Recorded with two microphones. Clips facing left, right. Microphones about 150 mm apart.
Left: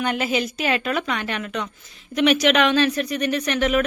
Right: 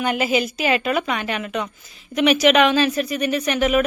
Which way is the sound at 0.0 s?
5° right (ahead or behind).